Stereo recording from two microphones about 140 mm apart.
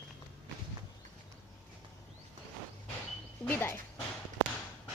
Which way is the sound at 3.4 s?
15° left (ahead or behind).